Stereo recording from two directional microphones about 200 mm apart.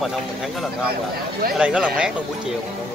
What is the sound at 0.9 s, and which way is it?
Speech, 50° right (ahead or behind).